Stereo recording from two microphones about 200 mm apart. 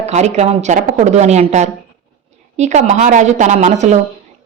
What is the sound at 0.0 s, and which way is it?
A woman's voice, 35° right (ahead or behind).